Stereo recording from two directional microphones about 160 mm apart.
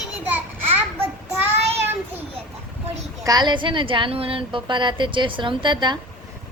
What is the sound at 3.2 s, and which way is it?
A woman's voice, 25° right (ahead or behind).